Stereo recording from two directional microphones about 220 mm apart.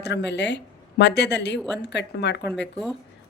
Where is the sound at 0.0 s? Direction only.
50° left (ahead or behind).